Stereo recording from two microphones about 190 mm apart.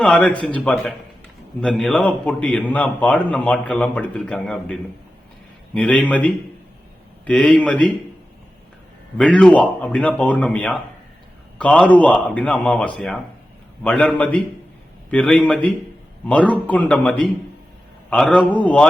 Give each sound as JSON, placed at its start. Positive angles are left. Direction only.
{"t": 0.0, "sound": "a man's voice", "side_deg": 5}
{"t": 9.1, "sound": "a man's voice", "side_deg": 5}